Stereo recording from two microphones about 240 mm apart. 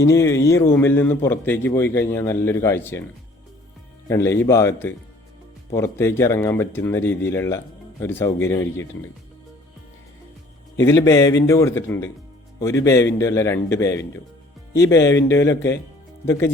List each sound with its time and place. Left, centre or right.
0.0 s a man's voice: centre
4.1 s a man's voice: centre
10.8 s a man's voice: centre
15.0 s speech: left
16.2 s a man's voice: centre